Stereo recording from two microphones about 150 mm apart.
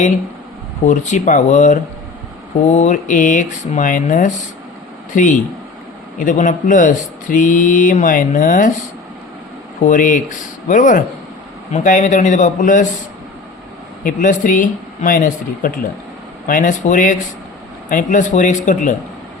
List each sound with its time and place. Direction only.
0.9 s speech: 55° left (ahead or behind)
9.8 s speech: 60° left (ahead or behind)
14.0 s speech: 60° left (ahead or behind)